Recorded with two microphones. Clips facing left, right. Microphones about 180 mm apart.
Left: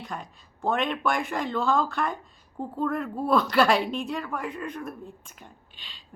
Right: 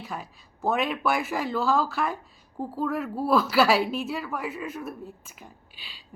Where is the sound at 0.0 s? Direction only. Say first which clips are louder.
Even; 5° right (ahead or behind).